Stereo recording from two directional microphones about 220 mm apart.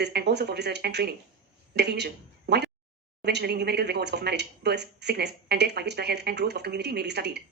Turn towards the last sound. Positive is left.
turn(degrees=-50)  # may be behind; listen again after turning